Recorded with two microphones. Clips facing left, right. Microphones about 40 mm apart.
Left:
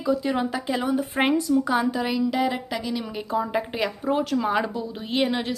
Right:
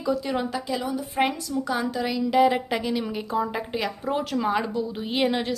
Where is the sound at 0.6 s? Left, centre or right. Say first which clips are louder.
Left 4 dB; left; by 2.2 s centre.